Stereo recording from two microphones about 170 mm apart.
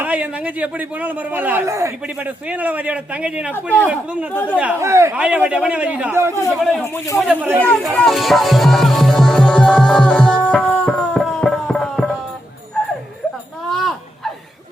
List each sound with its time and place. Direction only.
0.0 s speech: 10° right (ahead or behind)
3.5 s speech: 10° left (ahead or behind)
3.8 s speech: 10° right (ahead or behind)
6.3 s speech: 15° left (ahead or behind)
7.6 s music: 5° left (ahead or behind)
13.7 s a sound: centre (ahead or behind)